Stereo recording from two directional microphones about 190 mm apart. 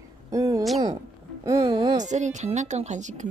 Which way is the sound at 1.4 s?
20° right (ahead or behind).